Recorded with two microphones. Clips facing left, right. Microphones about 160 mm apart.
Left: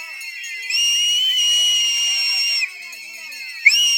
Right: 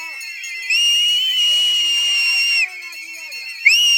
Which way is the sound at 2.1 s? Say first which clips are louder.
Right 4 dB; 20° left (ahead or behind).